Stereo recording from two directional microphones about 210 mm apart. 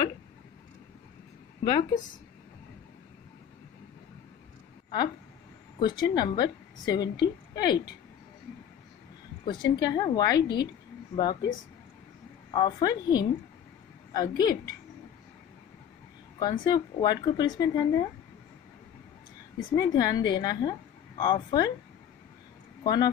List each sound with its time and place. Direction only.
1.6 s a woman's voice: 20° left (ahead or behind)
5.8 s a woman's voice: 20° left (ahead or behind)
9.4 s a woman's voice: 20° left (ahead or behind)
16.3 s a woman's voice: 20° left (ahead or behind)
19.7 s a woman's voice: 20° left (ahead or behind)
22.8 s a woman's voice: 20° left (ahead or behind)